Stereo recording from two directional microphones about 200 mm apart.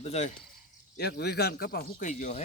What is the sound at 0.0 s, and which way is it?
Speech, 35° left (ahead or behind).